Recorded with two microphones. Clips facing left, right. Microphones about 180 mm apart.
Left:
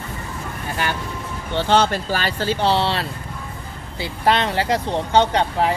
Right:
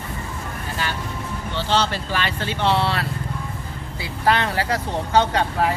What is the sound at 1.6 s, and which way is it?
Speech, 55° left (ahead or behind).